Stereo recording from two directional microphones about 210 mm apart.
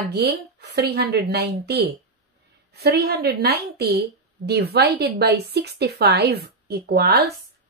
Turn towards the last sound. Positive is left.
turn(degrees=-50)  # may be behind; listen again after turning